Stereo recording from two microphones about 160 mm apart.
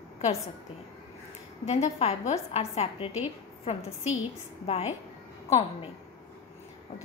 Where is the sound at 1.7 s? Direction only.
40° left (ahead or behind).